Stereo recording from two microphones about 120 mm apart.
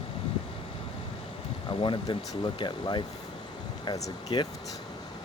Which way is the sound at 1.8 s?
40° left (ahead or behind).